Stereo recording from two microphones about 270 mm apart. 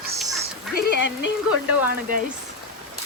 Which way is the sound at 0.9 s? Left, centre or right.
Left.